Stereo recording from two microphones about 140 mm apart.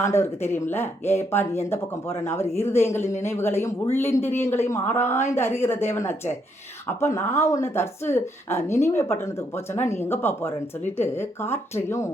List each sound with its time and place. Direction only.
0.0 s a woman's voice: 20° left (ahead or behind)